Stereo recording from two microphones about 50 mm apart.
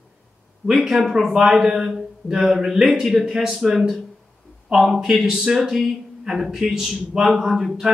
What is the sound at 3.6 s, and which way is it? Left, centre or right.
Speech, centre.